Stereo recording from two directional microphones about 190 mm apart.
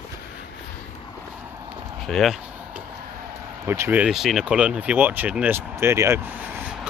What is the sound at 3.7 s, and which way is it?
Speech, 10° right (ahead or behind).